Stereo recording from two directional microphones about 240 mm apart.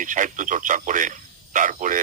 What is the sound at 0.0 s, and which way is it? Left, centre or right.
Speech, right.